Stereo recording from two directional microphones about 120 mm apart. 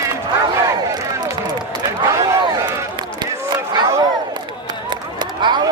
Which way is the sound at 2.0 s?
25° right (ahead or behind).